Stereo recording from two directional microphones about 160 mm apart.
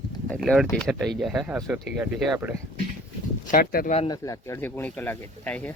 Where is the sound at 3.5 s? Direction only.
70° left (ahead or behind).